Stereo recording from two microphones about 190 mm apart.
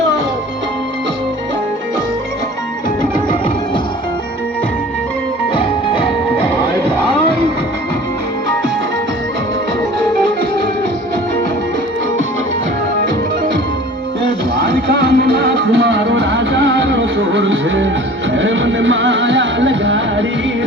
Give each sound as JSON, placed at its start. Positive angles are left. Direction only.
{"t": 5.5, "sound": "music", "side_deg": 25}
{"t": 14.3, "sound": "music", "side_deg": -50}